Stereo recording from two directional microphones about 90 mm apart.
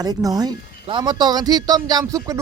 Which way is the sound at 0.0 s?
45° right (ahead or behind).